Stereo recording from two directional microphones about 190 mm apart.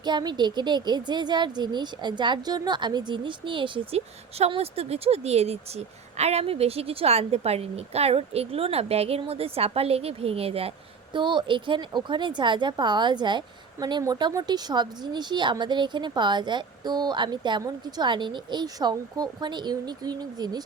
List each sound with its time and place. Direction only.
0.0 s speech: 25° right (ahead or behind)